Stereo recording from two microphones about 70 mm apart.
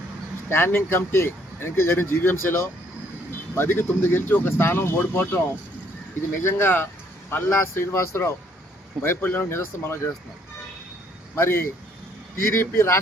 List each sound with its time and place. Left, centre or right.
0.5 s speech: left
6.4 s speech: left
9.0 s speech: left
11.3 s speech: left